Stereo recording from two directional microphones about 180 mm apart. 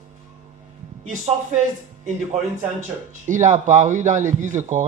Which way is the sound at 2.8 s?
45° right (ahead or behind).